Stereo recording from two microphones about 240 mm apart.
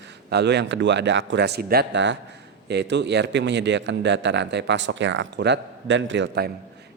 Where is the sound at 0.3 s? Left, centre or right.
Right.